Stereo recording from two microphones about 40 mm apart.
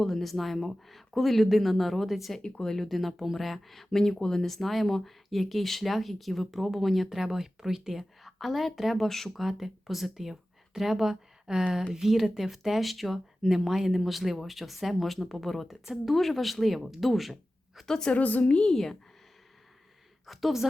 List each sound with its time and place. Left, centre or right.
0.0 s speech: centre
2.4 s speech: centre
2.9 s speech: centre
9.0 s speech: centre
9.4 s a woman's voice: centre
16.1 s speech: centre
17.8 s a woman's voice: centre
18.1 s a woman's voice: left
18.7 s speech: centre
20.2 s speech: centre